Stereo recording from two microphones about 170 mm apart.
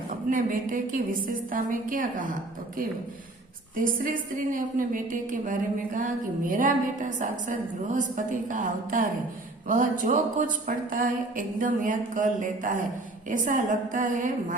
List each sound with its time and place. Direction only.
0.3 s a woman's voice: 50° right (ahead or behind)
3.8 s a woman's voice: 55° right (ahead or behind)